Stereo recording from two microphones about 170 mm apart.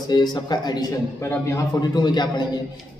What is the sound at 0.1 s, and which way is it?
A man's voice, 25° left (ahead or behind).